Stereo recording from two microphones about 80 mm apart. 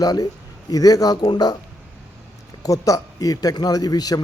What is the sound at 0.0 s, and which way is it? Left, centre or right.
A man's voice, left.